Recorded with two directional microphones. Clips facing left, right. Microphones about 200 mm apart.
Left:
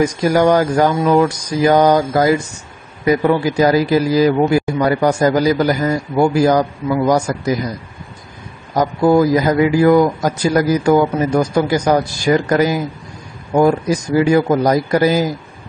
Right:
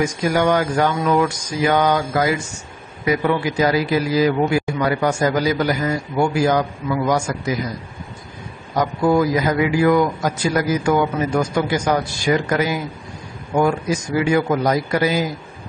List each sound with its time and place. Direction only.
0.0 s speech: 40° left (ahead or behind)
8.7 s speech: 40° left (ahead or behind)